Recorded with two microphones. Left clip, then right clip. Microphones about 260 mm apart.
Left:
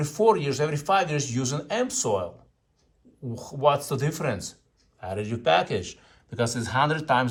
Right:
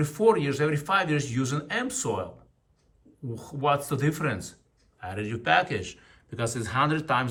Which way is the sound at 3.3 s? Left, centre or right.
Centre.